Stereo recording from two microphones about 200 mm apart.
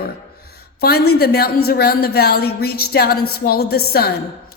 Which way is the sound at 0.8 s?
50° left (ahead or behind).